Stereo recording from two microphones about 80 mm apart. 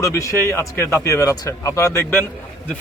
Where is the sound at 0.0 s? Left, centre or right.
Left.